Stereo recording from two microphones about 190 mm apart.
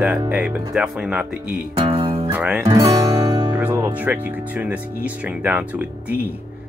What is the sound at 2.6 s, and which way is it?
Speech, 15° right (ahead or behind).